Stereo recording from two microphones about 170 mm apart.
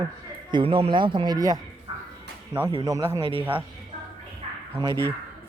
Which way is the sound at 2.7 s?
20° right (ahead or behind).